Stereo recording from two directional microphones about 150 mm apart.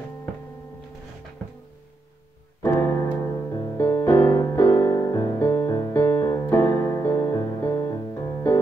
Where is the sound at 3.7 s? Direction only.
15° left (ahead or behind).